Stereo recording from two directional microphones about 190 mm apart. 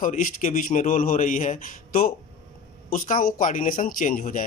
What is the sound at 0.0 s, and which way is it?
Speech, 45° left (ahead or behind).